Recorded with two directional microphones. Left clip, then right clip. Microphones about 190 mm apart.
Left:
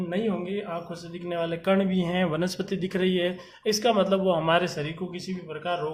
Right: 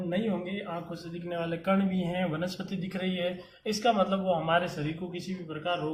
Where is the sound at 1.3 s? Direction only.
50° left (ahead or behind).